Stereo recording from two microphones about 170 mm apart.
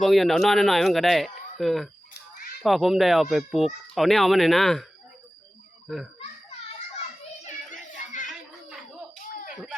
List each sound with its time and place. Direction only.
0.0 s speech: centre (ahead or behind)
6.1 s children playing: 35° left (ahead or behind)
7.4 s a sound: 50° left (ahead or behind)